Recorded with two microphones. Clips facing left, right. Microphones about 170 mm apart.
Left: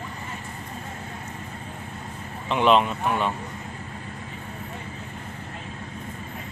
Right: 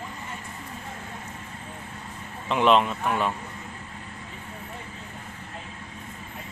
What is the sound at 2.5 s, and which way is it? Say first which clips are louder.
Speech: left 1 dB; centre (ahead or behind).